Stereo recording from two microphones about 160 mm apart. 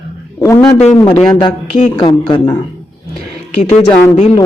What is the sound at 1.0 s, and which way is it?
A man's voice, 25° left (ahead or behind).